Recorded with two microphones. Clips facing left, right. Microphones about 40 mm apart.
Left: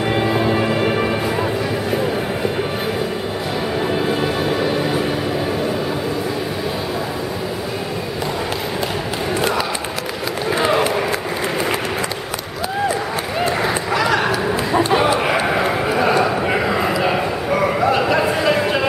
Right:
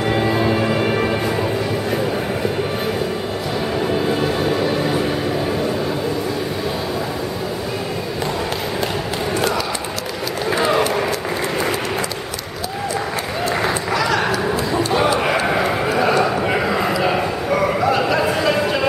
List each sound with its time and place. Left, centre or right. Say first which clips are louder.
0.1 s music: even; centre
4.1 s music: even; centre
10.5 s run: even; centre
13.6 s run: left 1 dB; centre
14.7 s a sound: left 3 dB; left
15.0 s a sound: even; centre